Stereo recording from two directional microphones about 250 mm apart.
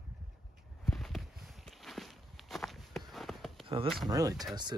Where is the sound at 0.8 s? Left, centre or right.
Centre.